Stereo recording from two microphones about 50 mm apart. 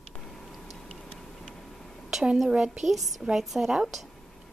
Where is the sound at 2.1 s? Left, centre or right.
Centre.